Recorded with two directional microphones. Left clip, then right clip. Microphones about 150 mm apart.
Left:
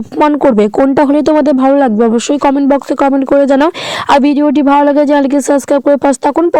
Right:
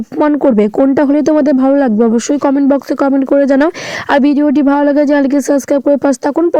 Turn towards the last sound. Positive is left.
turn(degrees=25)  # may be behind; listen again after turning